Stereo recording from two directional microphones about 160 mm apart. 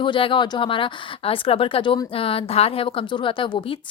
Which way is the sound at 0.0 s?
30° left (ahead or behind).